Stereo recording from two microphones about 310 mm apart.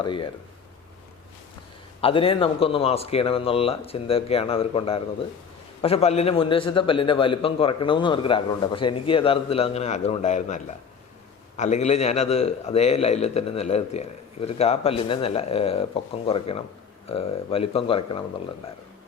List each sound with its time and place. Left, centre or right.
0.0 s a man's voice: centre
2.0 s a man's voice: centre